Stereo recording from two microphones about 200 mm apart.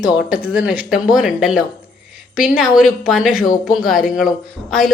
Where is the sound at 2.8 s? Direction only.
Centre (ahead or behind).